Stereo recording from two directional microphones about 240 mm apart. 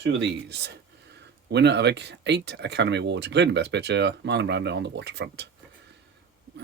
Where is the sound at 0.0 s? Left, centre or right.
Right.